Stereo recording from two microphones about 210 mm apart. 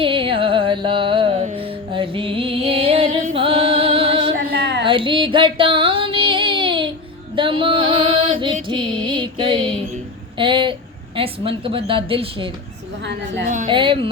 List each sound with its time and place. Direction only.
0.0 s music: 25° right (ahead or behind)
4.4 s a sound: 50° right (ahead or behind)
4.9 s a sound: 25° right (ahead or behind)
7.3 s female singing: 25° right (ahead or behind)
8.6 s music: 20° right (ahead or behind)
10.3 s a woman's voice: 25° right (ahead or behind)
13.1 s a woman's voice: 55° right (ahead or behind)
13.7 s a woman's voice: 25° right (ahead or behind)